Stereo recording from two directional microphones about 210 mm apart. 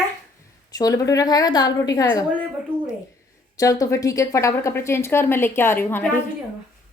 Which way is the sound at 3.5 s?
15° left (ahead or behind).